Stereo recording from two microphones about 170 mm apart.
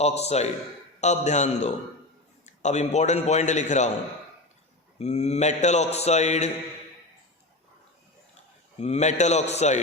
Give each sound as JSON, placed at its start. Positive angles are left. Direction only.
{"t": 0.0, "sound": "a man's voice", "side_deg": 40}
{"t": 4.9, "sound": "a man's voice", "side_deg": 40}
{"t": 8.8, "sound": "a man's voice", "side_deg": 40}